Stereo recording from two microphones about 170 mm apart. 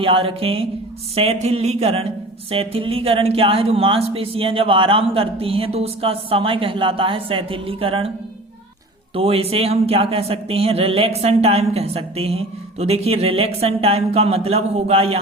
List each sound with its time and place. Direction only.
0.0 s speech: 30° right (ahead or behind)
9.1 s speech: 35° right (ahead or behind)